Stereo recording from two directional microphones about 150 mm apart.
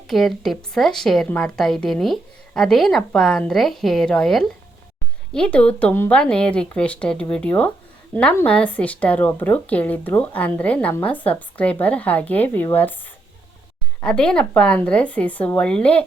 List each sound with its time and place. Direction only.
0.1 s a woman's voice: centre (ahead or behind)
14.0 s speech: 5° left (ahead or behind)